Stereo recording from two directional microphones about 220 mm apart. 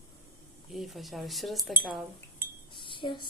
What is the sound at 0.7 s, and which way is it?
A woman's voice, centre (ahead or behind).